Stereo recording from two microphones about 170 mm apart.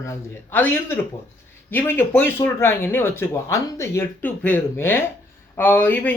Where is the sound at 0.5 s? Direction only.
10° left (ahead or behind).